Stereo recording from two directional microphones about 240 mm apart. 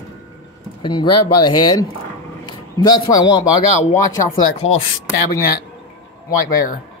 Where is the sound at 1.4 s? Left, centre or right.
Centre.